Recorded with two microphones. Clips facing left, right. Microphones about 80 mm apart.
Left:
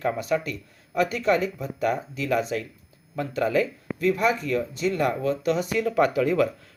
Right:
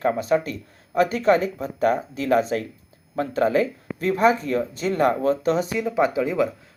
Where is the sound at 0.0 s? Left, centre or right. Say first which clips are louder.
Right 4 dB; right.